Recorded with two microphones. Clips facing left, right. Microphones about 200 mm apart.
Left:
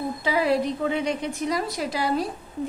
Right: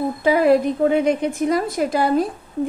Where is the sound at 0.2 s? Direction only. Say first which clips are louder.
Right 8 dB; 50° right (ahead or behind).